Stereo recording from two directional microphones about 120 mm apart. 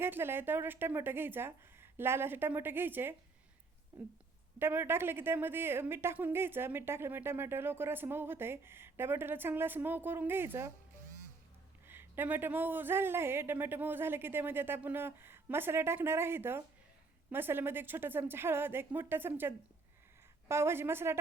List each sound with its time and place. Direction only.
0.0 s a woman's voice: 20° right (ahead or behind)
11.9 s a woman's voice: 20° right (ahead or behind)